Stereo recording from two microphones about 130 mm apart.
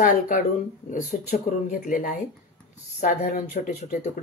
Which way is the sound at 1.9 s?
90° left.